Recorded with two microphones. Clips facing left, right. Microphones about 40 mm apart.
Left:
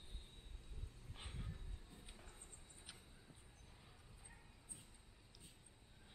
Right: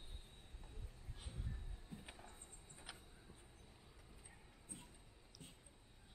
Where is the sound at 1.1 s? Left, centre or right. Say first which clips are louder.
Left 1 dB; left.